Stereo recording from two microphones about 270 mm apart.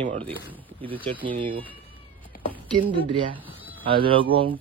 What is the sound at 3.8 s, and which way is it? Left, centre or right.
Speech, centre.